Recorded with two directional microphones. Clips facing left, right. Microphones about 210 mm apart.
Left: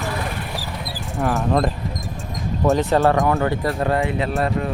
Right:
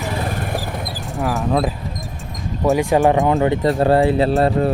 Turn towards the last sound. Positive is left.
turn(degrees=-30)  # may be behind; listen again after turning